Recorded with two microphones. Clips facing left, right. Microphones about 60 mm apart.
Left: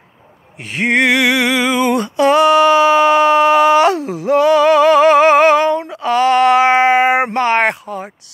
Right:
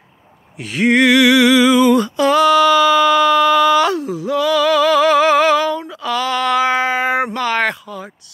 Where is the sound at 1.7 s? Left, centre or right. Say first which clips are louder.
Right 3 dB; left.